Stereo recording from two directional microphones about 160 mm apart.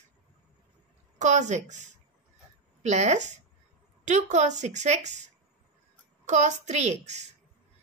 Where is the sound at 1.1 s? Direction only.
50° right (ahead or behind).